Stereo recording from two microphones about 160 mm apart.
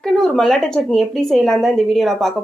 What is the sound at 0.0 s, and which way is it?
Speech, 5° left (ahead or behind).